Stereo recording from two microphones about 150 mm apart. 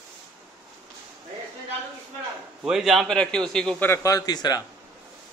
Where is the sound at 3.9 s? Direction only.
25° left (ahead or behind).